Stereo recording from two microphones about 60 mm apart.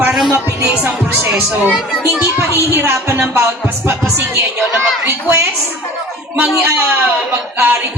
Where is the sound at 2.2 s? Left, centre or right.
Right.